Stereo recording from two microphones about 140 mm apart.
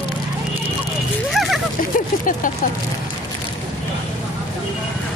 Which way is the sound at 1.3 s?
Centre (ahead or behind).